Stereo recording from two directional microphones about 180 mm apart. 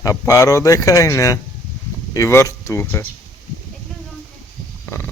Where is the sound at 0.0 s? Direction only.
20° left (ahead or behind).